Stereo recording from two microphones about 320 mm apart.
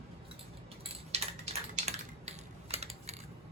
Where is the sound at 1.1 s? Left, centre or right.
Centre.